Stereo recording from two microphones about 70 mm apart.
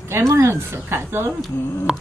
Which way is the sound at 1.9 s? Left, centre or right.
Centre.